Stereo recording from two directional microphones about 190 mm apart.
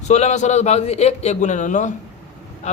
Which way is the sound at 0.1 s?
35° left (ahead or behind).